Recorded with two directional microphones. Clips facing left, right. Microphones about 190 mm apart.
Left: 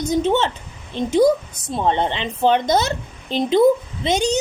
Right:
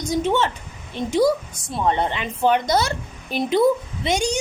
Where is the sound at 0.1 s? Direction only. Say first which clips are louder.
Left 2 dB; 25° left (ahead or behind).